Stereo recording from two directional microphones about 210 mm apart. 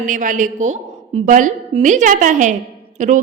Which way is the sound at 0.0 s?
40° right (ahead or behind).